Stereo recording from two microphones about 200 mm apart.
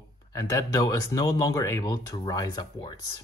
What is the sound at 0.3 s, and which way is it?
Speech, 15° left (ahead or behind).